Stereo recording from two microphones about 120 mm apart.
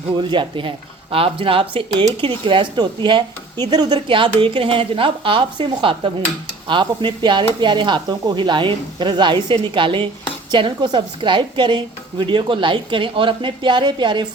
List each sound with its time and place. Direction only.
0.2 s a woman's voice: 40° right (ahead or behind)